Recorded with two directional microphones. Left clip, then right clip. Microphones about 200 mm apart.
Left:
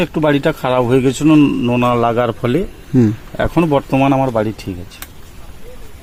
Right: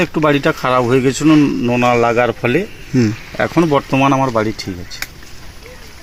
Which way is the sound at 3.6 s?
20° left (ahead or behind).